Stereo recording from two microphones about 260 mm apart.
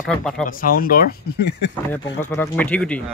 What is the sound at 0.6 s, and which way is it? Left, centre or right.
Speech, left.